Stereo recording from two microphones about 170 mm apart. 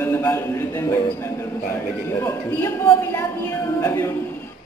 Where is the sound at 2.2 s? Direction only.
15° left (ahead or behind).